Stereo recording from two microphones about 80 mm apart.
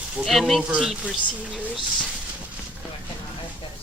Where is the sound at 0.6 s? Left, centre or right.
Centre.